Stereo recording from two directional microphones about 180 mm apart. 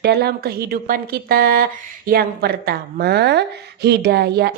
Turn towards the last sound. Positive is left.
turn(degrees=-65)  # may be behind; listen again after turning